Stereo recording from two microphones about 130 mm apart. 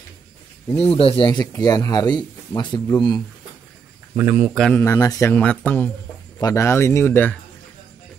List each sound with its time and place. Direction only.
0.7 s speech: 45° left (ahead or behind)
1.5 s speech: 25° left (ahead or behind)
4.2 s speech: 15° right (ahead or behind)
4.7 s speech: 20° left (ahead or behind)
6.4 s speech: 20° left (ahead or behind)